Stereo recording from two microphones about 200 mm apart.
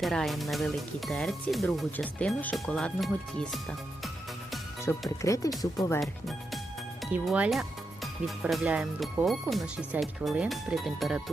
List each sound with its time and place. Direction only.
0.0 s speech: centre (ahead or behind)
4.8 s speech: 15° left (ahead or behind)
6.0 s speech: centre (ahead or behind)